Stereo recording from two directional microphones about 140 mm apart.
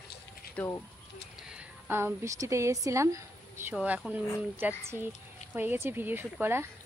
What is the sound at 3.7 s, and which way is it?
Speech, 5° right (ahead or behind).